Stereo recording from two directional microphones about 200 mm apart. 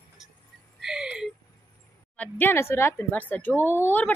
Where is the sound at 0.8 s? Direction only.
5° right (ahead or behind).